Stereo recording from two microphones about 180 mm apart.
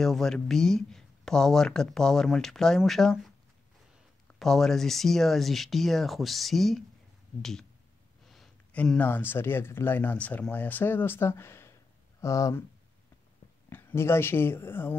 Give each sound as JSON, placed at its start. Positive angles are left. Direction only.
{"t": 0.0, "sound": "speech", "side_deg": 0}
{"t": 8.3, "sound": "speech", "side_deg": 0}
{"t": 13.7, "sound": "speech", "side_deg": 10}